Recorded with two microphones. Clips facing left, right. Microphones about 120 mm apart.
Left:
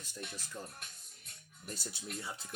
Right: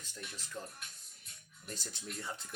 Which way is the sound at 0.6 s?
10° left (ahead or behind).